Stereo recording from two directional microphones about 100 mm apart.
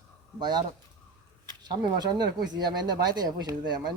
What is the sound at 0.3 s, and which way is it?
Speech, 45° right (ahead or behind).